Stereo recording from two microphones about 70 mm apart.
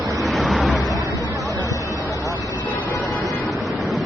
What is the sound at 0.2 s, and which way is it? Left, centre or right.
Vehicle, centre.